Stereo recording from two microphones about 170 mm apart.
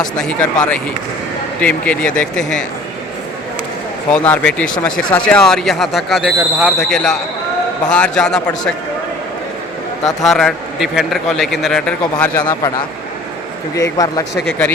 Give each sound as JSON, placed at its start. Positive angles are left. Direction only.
{"t": 0.0, "sound": "speech", "side_deg": 5}
{"t": 4.1, "sound": "a man's voice", "side_deg": 5}
{"t": 10.2, "sound": "a man's voice", "side_deg": 0}
{"t": 13.7, "sound": "speech", "side_deg": 20}